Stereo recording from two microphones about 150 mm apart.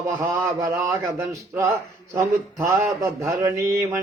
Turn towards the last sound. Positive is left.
turn(degrees=-15)  # may be behind; listen again after turning